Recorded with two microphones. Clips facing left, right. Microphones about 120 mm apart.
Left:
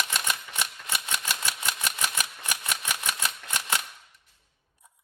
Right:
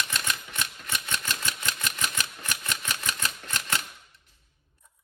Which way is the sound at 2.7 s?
10° left (ahead or behind).